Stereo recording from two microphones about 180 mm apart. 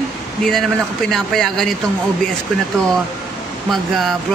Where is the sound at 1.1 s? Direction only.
Centre (ahead or behind).